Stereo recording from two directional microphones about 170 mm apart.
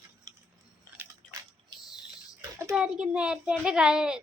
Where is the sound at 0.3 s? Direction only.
25° right (ahead or behind).